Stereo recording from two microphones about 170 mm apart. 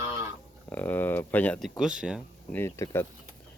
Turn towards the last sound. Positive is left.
turn(degrees=15)  # may be behind; listen again after turning